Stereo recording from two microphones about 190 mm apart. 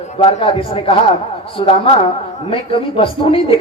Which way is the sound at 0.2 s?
30° left (ahead or behind).